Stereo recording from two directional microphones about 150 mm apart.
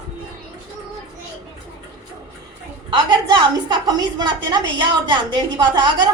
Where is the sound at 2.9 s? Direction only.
30° right (ahead or behind).